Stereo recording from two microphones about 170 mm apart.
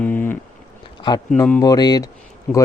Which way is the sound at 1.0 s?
25° left (ahead or behind).